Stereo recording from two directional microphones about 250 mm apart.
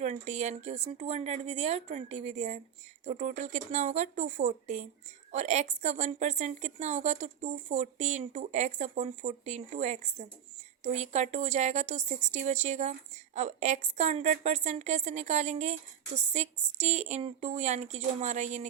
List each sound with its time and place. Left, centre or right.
0.0 s a woman's voice: right